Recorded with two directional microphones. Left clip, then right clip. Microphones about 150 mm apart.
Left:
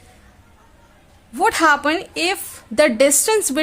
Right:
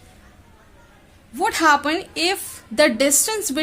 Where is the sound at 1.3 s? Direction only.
35° left (ahead or behind).